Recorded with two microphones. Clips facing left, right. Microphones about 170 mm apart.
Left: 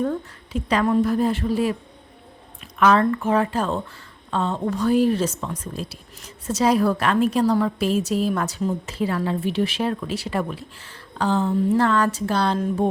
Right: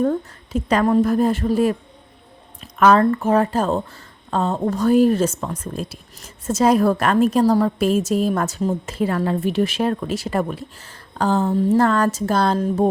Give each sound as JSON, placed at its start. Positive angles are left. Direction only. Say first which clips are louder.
{"t": 0.0, "sound": "a woman's voice", "louder": "right 4 dB", "side_deg": -45}
{"t": 2.7, "sound": "a woman's voice", "louder": "right 3 dB", "side_deg": -40}